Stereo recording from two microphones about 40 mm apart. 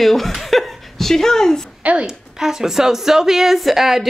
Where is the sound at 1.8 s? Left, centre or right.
Right.